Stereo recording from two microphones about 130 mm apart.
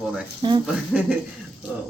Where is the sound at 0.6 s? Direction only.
5° right (ahead or behind).